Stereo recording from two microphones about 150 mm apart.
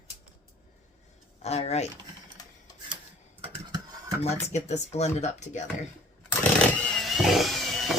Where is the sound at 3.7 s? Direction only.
25° right (ahead or behind).